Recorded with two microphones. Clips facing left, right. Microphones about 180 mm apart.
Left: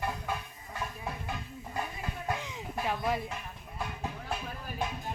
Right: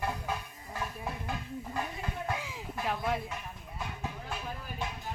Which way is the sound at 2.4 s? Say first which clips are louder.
Left 1 dB; centre (ahead or behind).